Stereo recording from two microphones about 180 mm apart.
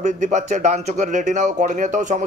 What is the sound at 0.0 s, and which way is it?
Speech, 40° right (ahead or behind).